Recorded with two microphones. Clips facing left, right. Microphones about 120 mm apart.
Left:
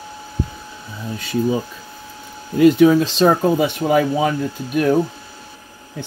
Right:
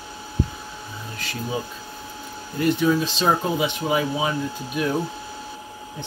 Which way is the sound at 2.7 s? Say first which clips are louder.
Left 8 dB; 90° left.